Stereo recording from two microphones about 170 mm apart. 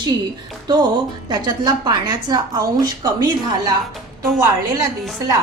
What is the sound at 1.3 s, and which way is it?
Speech, 25° right (ahead or behind).